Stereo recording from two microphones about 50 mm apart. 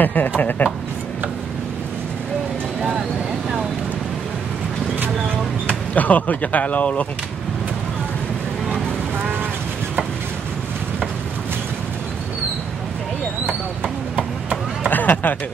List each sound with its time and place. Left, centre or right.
0.0 s speech: left
5.7 s speech: left
14.9 s a sound: left